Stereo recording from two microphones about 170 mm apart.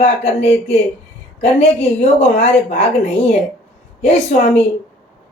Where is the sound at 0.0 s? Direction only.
40° left (ahead or behind).